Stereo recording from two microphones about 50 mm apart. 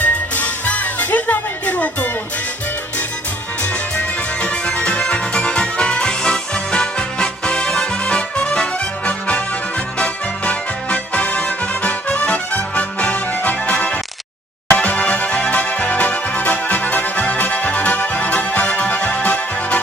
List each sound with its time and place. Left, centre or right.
0.0 s music: left
4.4 s music: left